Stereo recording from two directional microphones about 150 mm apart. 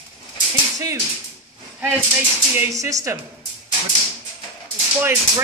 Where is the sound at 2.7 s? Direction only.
20° right (ahead or behind).